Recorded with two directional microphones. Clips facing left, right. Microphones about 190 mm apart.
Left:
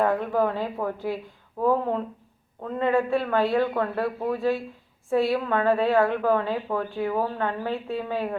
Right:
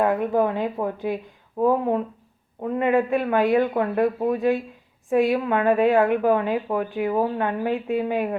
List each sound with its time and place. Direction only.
0.0 s a woman's voice: 15° right (ahead or behind)